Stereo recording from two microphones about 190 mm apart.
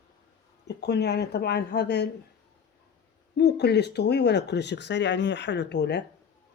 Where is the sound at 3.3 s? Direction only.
60° left (ahead or behind).